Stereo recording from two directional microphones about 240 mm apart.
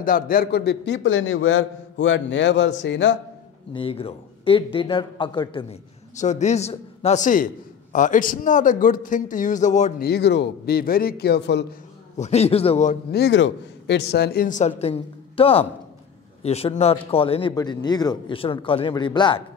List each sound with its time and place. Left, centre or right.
0.0 s a man's voice: left
3.7 s a man's voice: left
12.2 s a man's voice: left
13.1 s a man's voice: left; by 19.4 s centre